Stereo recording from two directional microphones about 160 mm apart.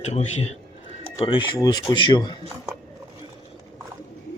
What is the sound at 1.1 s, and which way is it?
Speech, 35° left (ahead or behind).